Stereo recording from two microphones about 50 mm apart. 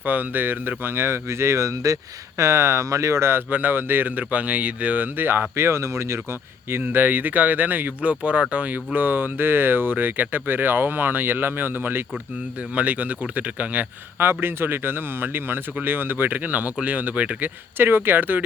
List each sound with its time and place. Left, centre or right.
0.0 s speech: right
2.4 s speech: right
3.5 s speech: right
5.1 s speech: right
5.5 s speech: right
6.7 s speech: right
8.2 s speech: right
12.7 s speech: right
14.2 s speech: right
17.7 s speech: right